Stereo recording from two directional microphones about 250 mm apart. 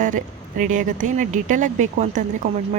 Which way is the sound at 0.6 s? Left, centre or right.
Right.